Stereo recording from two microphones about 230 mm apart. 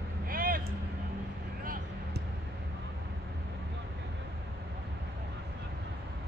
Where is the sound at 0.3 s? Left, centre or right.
Right.